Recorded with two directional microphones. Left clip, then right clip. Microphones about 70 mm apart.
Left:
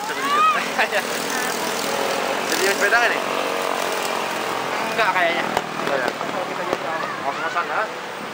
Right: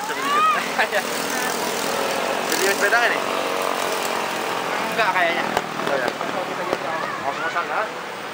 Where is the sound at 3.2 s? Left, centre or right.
Left.